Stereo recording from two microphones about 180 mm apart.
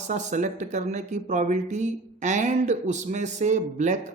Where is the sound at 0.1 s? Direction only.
40° right (ahead or behind).